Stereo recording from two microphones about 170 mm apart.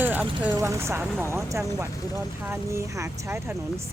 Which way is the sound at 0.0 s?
10° right (ahead or behind).